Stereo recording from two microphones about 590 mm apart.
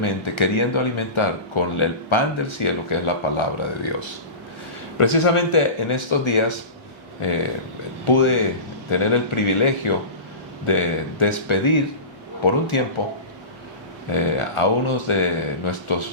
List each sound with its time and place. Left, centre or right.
0.0 s speech: left
4.9 s speech: left
14.1 s speech: left